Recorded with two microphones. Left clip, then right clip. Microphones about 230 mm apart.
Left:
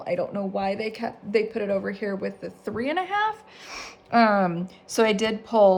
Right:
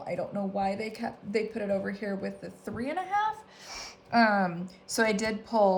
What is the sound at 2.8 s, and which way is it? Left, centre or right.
Speech, left.